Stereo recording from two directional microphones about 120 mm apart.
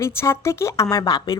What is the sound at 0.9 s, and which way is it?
Speech, 35° left (ahead or behind).